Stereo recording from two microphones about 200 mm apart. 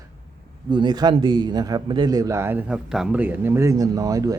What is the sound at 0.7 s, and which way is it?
A man's voice, 20° right (ahead or behind).